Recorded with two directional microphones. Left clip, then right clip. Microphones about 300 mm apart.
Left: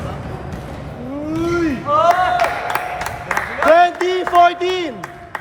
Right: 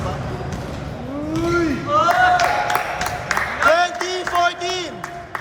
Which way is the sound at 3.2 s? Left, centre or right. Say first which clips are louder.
Left 3 dB; left.